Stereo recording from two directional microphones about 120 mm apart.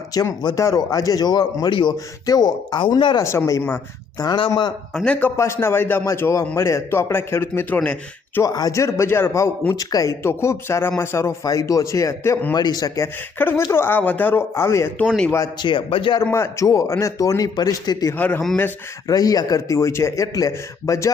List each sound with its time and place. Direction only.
0.1 s speech: 30° left (ahead or behind)
3.2 s speech: 25° left (ahead or behind)
4.2 s speech: 40° left (ahead or behind)
4.9 s a man's voice: 10° left (ahead or behind)
5.4 s speech: 20° left (ahead or behind)
8.4 s speech: 30° left (ahead or behind)
14.9 s a man's voice: 10° left (ahead or behind)
15.6 s a man's voice: 45° left (ahead or behind)
16.2 s speech: 20° left (ahead or behind)
18.2 s a man's voice: 15° left (ahead or behind)
19.0 s speech: 30° left (ahead or behind)